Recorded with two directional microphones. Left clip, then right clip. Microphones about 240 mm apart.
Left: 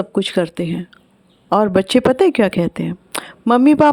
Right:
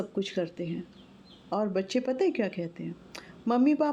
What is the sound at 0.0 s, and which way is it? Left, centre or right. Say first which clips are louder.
A woman's voice: left 13 dB; left.